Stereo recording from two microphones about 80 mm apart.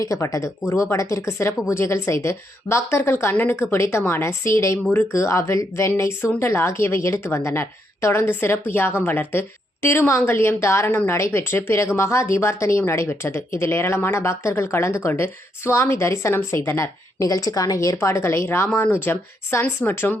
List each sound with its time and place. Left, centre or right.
0.0 s speech: left
3.3 s a woman's voice: left
3.6 s a woman's voice: left